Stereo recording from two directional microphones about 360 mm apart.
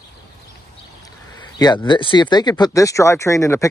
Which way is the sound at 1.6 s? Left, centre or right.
Centre.